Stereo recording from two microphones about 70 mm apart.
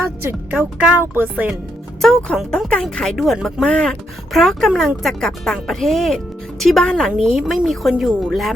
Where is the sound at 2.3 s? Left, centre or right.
Centre.